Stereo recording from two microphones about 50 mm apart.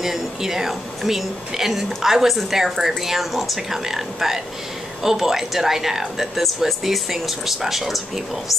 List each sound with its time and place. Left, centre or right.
0.0 s a woman's voice: centre